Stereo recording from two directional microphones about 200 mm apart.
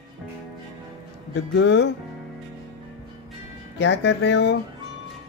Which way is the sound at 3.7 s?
65° left (ahead or behind).